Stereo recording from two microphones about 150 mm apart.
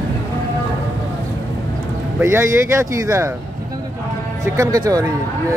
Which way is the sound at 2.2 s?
20° right (ahead or behind).